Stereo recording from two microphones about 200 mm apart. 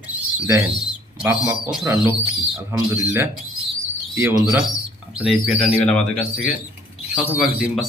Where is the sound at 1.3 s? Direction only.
10° right (ahead or behind).